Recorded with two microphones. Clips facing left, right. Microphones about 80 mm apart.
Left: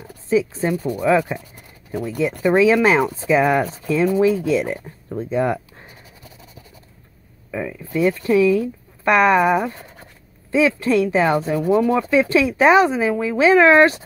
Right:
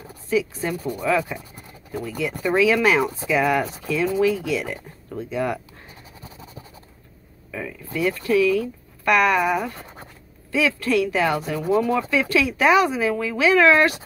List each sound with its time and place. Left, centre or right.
0.3 s speech: left
7.5 s speech: left